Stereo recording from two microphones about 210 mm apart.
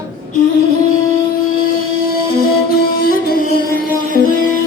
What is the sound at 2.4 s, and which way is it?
Music, 45° left (ahead or behind).